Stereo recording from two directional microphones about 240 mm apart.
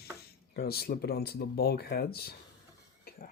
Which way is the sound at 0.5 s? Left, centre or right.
Left.